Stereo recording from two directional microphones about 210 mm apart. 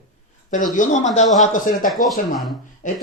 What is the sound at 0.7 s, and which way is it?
Speech, 35° left (ahead or behind).